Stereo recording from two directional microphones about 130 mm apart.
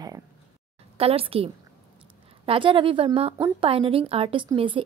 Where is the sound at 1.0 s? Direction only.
50° right (ahead or behind).